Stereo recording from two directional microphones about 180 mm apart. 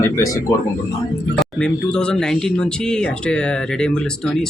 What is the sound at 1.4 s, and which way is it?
Speech, 5° left (ahead or behind).